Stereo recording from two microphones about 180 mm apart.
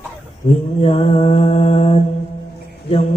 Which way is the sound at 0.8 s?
35° left (ahead or behind).